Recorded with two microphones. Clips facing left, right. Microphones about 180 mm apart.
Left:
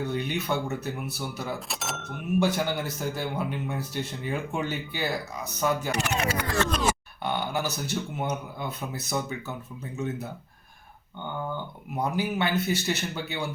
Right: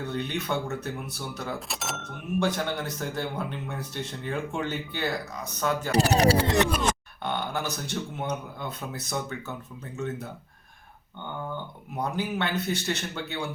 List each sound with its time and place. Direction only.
0.0 s speech: 10° left (ahead or behind)
5.9 s speech: 35° right (ahead or behind)
6.8 s speech: 5° left (ahead or behind)
11.9 s speech: 10° left (ahead or behind)